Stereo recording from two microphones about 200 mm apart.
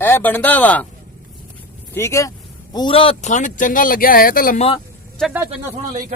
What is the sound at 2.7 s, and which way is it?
Speech, 25° left (ahead or behind).